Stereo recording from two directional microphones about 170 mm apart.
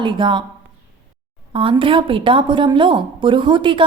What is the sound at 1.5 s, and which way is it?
A woman's voice, 30° right (ahead or behind).